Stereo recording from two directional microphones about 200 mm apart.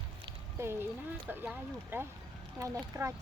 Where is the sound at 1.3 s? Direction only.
10° right (ahead or behind).